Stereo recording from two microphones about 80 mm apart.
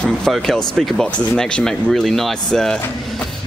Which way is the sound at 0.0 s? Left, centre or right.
Centre.